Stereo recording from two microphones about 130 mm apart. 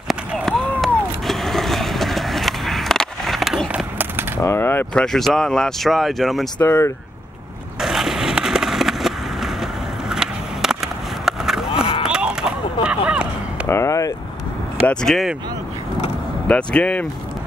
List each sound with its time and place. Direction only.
0.1 s skateboard: centre (ahead or behind)
4.4 s speech: 20° left (ahead or behind); by 6.5 s centre (ahead or behind)
6.6 s speech: 20° left (ahead or behind)
7.8 s skateboard: centre (ahead or behind)
12.0 s a sound: 5° right (ahead or behind)
13.7 s a sound: 20° left (ahead or behind)
14.9 s speech: 5° left (ahead or behind)
16.4 s speech: 10° left (ahead or behind)